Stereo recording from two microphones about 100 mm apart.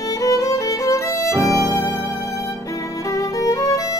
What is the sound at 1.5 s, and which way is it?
Music, 35° right (ahead or behind).